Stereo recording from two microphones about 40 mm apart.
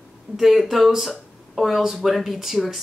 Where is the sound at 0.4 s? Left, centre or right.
Centre.